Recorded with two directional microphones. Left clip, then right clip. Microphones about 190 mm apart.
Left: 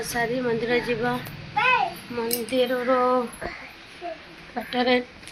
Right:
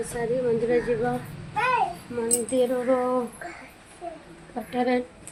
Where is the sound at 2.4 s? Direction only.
15° right (ahead or behind).